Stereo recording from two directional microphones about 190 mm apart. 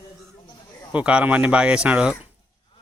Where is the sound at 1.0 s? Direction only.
5° right (ahead or behind).